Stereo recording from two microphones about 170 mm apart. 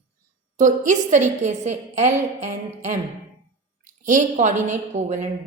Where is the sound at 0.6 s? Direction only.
45° right (ahead or behind).